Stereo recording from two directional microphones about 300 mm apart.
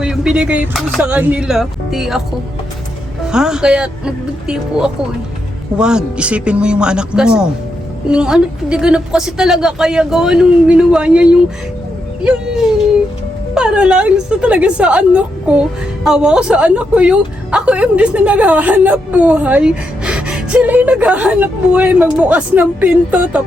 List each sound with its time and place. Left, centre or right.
0.0 s speech: centre
3.2 s speech: centre
13.5 s speech: centre